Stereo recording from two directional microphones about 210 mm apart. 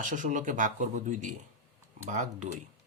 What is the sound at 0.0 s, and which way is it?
Speech, 40° right (ahead or behind).